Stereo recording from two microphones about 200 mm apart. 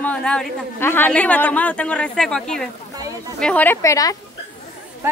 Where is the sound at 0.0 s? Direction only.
5° left (ahead or behind).